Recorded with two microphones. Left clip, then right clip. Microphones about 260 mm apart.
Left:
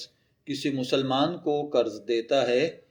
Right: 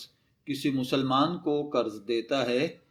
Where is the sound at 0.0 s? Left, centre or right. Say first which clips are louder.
Left 2 dB; right.